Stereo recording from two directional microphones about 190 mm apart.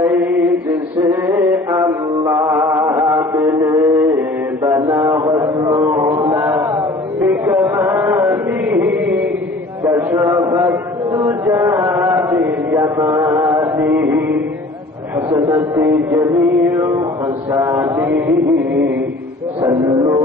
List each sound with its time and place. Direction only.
0.0 s chant: 10° right (ahead or behind)
4.6 s a sound: 15° right (ahead or behind)
15.1 s music: 15° right (ahead or behind)
17.5 s mantra: 15° right (ahead or behind)
19.6 s music: 15° right (ahead or behind)